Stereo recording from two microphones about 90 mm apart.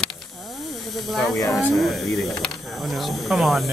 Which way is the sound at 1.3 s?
35° left (ahead or behind).